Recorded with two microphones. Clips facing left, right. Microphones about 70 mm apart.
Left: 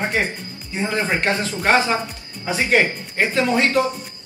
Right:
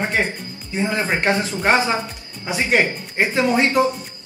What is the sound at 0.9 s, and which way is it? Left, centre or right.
Speech, right.